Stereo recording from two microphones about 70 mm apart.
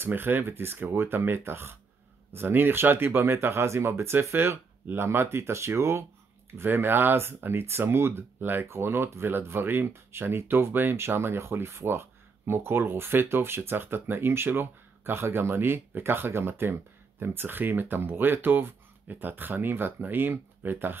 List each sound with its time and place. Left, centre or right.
0.0 s speech: right